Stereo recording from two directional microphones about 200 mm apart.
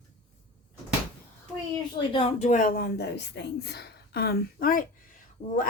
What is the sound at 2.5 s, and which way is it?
Speech, 45° left (ahead or behind).